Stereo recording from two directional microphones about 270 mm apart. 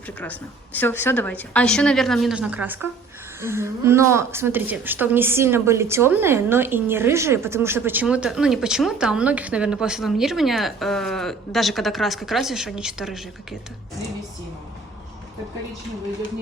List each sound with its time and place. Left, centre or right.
0.2 s a woman's voice: centre